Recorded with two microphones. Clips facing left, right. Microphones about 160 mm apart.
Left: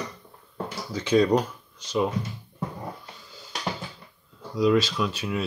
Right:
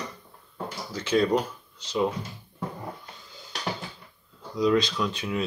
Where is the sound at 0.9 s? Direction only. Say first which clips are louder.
Left 3 dB; 15° left (ahead or behind).